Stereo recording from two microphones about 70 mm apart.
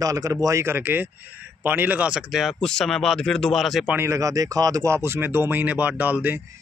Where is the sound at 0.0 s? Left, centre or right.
Right.